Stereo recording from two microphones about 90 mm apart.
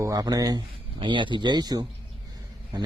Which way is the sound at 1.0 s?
65° right (ahead or behind).